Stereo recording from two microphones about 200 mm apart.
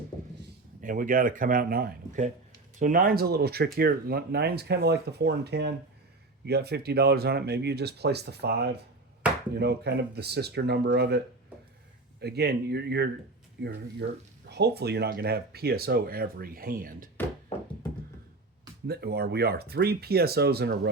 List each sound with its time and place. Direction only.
0.8 s speech: 40° right (ahead or behind)
12.2 s speech: 55° right (ahead or behind)
18.9 s speech: 55° right (ahead or behind)